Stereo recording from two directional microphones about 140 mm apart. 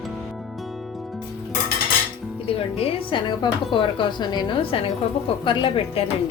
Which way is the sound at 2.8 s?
35° left (ahead or behind).